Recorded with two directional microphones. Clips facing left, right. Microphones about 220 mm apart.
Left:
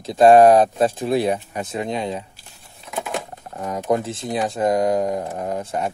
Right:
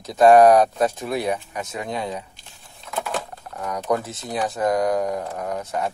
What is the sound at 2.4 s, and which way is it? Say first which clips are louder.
Crumpling: even; 15° left (ahead or behind).